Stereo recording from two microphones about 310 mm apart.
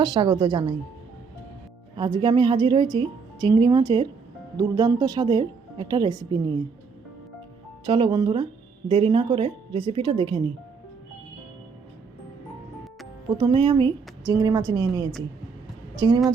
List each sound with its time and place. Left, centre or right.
0.0 s a woman's voice: centre
2.0 s a woman's voice: centre
7.9 s a woman's voice: centre
13.3 s a woman's voice: centre